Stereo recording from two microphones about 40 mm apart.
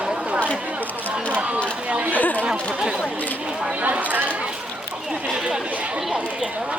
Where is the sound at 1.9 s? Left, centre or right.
Right.